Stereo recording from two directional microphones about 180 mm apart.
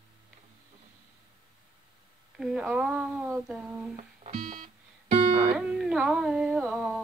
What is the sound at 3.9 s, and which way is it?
Music, 40° right (ahead or behind).